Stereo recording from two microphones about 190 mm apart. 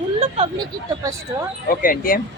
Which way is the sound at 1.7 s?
45° left (ahead or behind).